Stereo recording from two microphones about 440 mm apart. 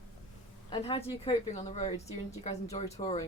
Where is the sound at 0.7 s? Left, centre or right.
Centre.